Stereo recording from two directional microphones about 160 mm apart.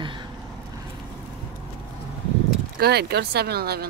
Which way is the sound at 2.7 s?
85° right.